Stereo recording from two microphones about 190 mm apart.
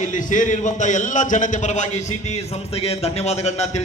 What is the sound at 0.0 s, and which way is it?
A man's voice, 40° left (ahead or behind).